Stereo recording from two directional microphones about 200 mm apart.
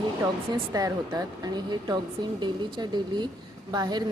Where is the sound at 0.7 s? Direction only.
20° right (ahead or behind).